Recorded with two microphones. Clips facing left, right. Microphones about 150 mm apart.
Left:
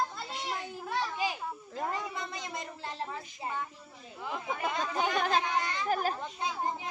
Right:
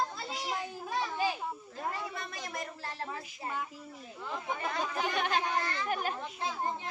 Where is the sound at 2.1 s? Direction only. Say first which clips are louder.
Left 1 dB; 20° left (ahead or behind).